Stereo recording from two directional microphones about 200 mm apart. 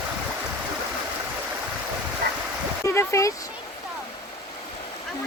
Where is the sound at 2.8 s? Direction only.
15° left (ahead or behind).